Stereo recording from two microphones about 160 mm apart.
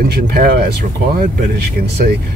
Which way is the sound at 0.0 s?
70° right (ahead or behind).